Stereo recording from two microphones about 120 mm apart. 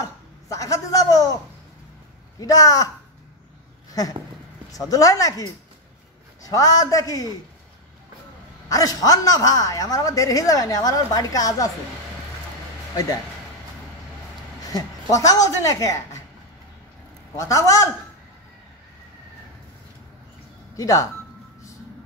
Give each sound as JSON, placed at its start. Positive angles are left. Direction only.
{"t": 0.0, "sound": "speech", "side_deg": 25}
{"t": 2.4, "sound": "a woman's voice", "side_deg": 30}
{"t": 4.7, "sound": "a woman's voice", "side_deg": 30}
{"t": 8.6, "sound": "a woman's voice", "side_deg": 30}
{"t": 14.7, "sound": "a woman's voice", "side_deg": 30}
{"t": 17.4, "sound": "a woman's voice", "side_deg": 25}
{"t": 20.7, "sound": "a woman's voice", "side_deg": 25}